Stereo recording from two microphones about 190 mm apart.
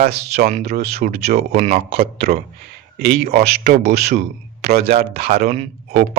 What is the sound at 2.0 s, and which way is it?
Speech, 55° right (ahead or behind).